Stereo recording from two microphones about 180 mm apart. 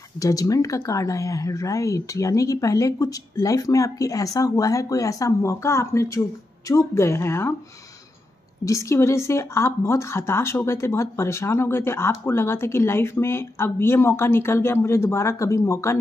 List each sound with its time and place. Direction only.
0.2 s speech: 20° left (ahead or behind)
8.6 s speech: 15° left (ahead or behind)